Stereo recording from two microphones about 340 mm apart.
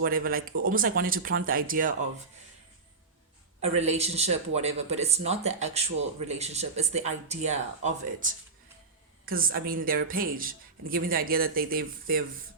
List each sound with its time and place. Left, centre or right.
0.0 s a man's voice: right
3.6 s a man's voice: centre